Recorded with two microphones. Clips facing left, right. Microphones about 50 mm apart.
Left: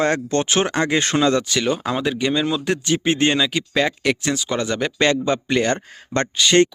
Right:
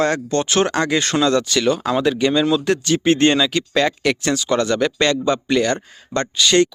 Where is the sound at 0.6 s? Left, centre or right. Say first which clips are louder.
Right 1 dB; centre.